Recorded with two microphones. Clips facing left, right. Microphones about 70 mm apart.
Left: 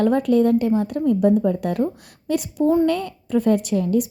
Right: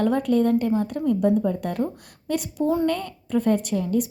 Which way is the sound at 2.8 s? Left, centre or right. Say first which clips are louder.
Left 3 dB; left.